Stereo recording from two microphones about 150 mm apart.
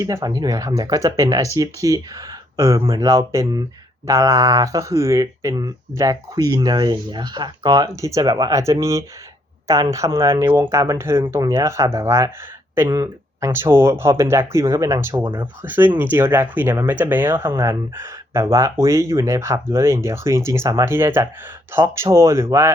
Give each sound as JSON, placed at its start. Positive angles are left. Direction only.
{"t": 0.0, "sound": "speech", "side_deg": -20}